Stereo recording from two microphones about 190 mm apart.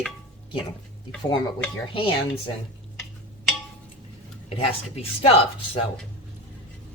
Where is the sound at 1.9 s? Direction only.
25° left (ahead or behind).